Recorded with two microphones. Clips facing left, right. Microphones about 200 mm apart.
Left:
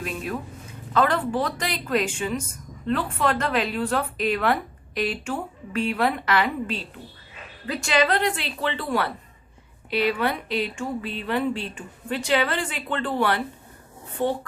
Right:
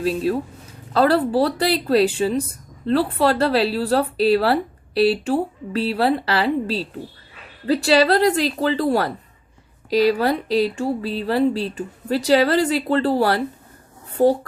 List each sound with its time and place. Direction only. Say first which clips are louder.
0.0 s speech: right 9 dB; 30° right (ahead or behind)